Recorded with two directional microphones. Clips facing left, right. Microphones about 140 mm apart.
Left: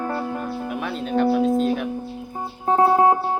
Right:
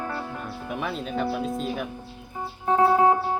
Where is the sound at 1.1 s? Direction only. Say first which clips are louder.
Left 11 dB; centre (ahead or behind).